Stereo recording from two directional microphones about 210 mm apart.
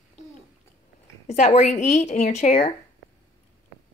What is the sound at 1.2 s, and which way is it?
Speech, 35° left (ahead or behind).